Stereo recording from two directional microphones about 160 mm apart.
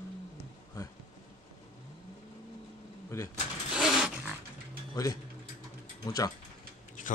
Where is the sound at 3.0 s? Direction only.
20° left (ahead or behind).